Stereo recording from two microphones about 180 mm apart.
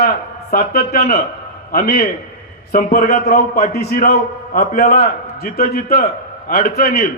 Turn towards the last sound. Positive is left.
turn(degrees=55)  # may be behind; listen again after turning